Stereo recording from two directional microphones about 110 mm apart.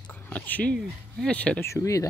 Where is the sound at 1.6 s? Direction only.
30° left (ahead or behind).